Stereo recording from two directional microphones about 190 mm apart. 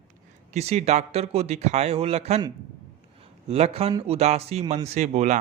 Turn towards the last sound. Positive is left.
turn(degrees=-40)  # may be behind; listen again after turning